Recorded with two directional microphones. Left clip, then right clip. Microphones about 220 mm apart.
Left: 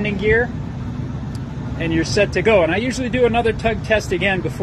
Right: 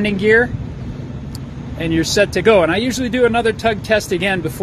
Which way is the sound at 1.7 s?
35° right (ahead or behind).